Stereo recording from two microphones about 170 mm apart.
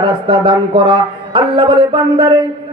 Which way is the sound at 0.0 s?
30° right (ahead or behind).